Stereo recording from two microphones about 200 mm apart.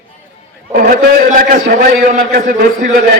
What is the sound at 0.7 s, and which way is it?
A man's voice, 45° right (ahead or behind).